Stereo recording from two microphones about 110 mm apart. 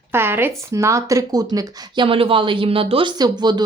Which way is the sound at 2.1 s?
55° right (ahead or behind).